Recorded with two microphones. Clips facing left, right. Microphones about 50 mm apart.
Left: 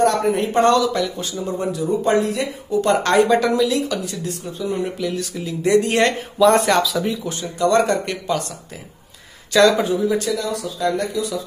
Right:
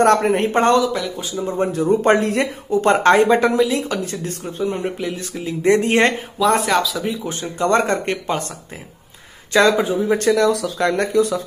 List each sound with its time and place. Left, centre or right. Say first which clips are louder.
0.0 s speech: right 3 dB; right
4.8 s speech: even; right
6.3 s speech: left 5 dB; centre
7.2 s speech: right 3 dB; right
9.5 s speech: even; right
10.0 s speech: right 5 dB; right